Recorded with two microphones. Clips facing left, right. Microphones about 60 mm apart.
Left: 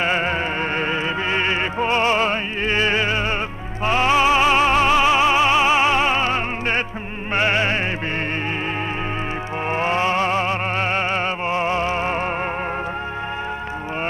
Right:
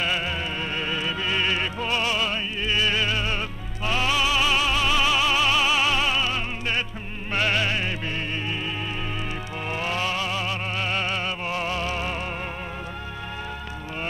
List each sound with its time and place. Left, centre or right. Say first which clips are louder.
0.0 s music: left 6 dB; left
9.7 s music: left 7 dB; left